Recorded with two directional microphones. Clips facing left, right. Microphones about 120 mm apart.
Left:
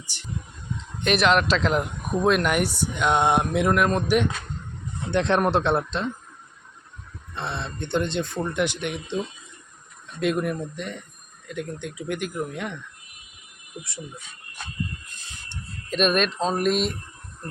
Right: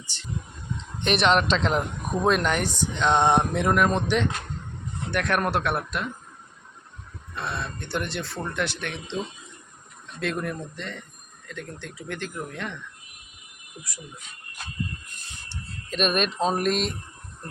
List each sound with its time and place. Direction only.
0.0 s speech: 15° left (ahead or behind)
1.0 s speech: centre (ahead or behind)
5.1 s speech: 25° left (ahead or behind)
7.3 s speech: 25° left (ahead or behind)
10.2 s speech: 15° left (ahead or behind)
15.9 s speech: centre (ahead or behind)